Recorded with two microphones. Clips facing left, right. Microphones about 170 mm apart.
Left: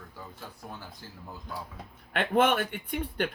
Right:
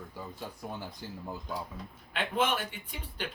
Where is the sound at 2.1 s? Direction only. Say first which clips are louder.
Left 6 dB; 55° left (ahead or behind).